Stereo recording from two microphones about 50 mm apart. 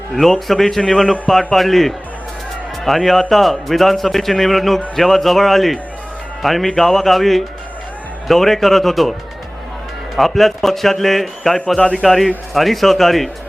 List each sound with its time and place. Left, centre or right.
0.1 s a man's voice: centre
10.2 s a man's voice: centre
11.8 s a man's voice: centre
12.0 s a man's voice: centre